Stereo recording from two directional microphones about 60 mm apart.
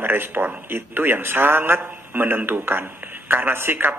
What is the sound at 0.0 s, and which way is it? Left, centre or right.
A man's voice, right.